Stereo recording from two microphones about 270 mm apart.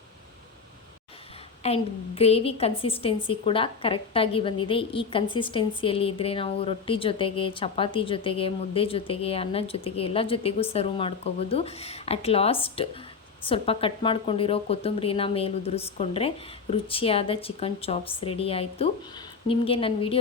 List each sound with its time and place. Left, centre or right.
1.6 s a woman's voice: left